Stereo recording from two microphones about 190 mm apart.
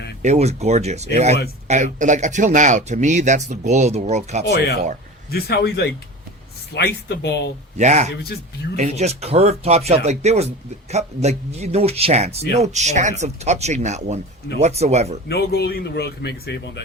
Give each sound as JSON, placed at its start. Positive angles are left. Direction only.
{"t": 0.2, "sound": "speech", "side_deg": -35}
{"t": 5.3, "sound": "speech", "side_deg": 60}
{"t": 7.8, "sound": "speech", "side_deg": -35}
{"t": 15.3, "sound": "speech", "side_deg": 60}